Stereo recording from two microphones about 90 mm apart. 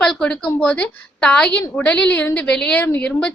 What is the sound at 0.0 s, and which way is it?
A woman's voice, 10° left (ahead or behind).